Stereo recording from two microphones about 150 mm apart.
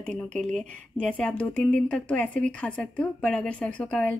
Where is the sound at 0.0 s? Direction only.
5° left (ahead or behind).